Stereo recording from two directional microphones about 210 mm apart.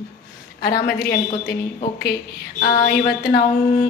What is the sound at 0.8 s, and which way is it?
Speech, 45° left (ahead or behind).